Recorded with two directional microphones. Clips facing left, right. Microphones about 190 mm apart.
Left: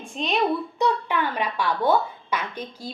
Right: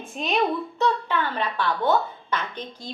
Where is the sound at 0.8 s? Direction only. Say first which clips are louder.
Even; 15° left (ahead or behind).